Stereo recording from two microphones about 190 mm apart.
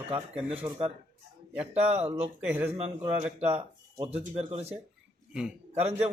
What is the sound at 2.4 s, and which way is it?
Speech, 10° right (ahead or behind).